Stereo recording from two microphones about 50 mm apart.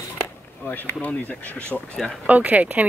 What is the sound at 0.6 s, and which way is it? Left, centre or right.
Speech, left.